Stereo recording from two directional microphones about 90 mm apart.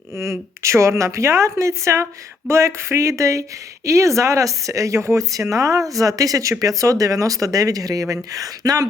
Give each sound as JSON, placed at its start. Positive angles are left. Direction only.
{"t": 0.2, "sound": "speech", "side_deg": -35}